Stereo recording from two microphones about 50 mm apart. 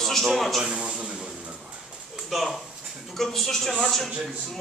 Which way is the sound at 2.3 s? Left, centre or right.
Centre.